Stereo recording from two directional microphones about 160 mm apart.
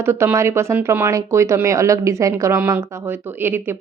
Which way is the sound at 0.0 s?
15° right (ahead or behind).